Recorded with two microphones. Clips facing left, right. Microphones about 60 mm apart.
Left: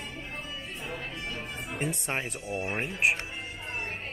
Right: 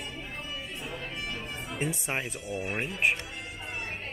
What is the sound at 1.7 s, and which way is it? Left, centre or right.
Speech, centre.